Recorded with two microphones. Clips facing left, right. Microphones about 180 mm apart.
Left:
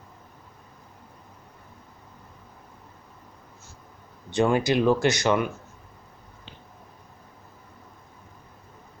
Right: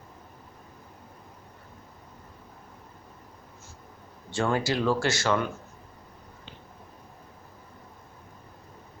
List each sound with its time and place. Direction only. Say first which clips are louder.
4.3 s speech: left 5 dB; 20° left (ahead or behind)